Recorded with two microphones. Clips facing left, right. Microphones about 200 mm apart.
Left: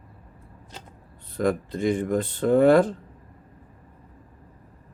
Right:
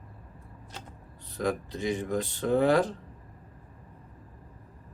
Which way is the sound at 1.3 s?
55° left (ahead or behind).